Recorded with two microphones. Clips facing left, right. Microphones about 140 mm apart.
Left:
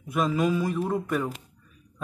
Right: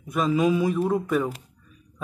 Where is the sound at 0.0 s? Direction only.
Centre (ahead or behind).